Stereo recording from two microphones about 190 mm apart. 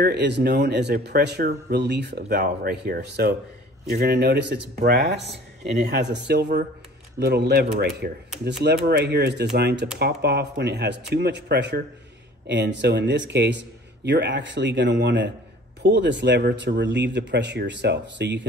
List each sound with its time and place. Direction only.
0.0 s speech: 65° right (ahead or behind)